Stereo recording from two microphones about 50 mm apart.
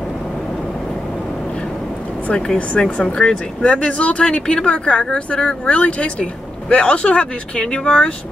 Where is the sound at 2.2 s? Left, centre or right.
Left.